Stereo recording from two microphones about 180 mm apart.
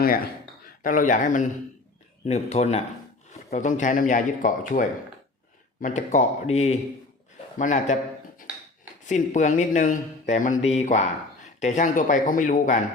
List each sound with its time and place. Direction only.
0.0 s a man's voice: 55° left (ahead or behind)
9.0 s speech: 40° left (ahead or behind)